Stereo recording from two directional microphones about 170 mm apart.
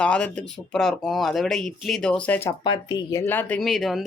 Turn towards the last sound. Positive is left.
turn(degrees=0)  # may be behind; listen again after turning